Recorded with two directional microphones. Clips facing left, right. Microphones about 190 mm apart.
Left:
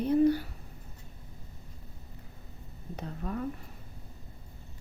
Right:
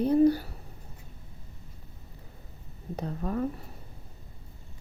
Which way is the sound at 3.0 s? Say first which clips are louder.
Right 5 dB; 40° right (ahead or behind).